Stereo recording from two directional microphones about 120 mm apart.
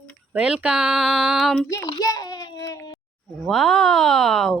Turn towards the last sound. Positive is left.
turn(degrees=0)  # may be behind; listen again after turning